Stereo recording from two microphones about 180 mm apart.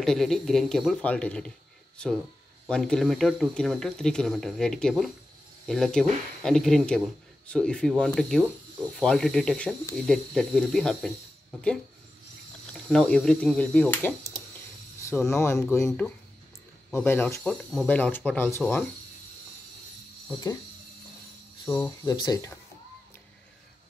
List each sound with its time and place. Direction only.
0.0 s speech: centre (ahead or behind)
2.7 s speech: centre (ahead or behind)
12.7 s speech: 5° left (ahead or behind)
21.6 s speech: 15° left (ahead or behind)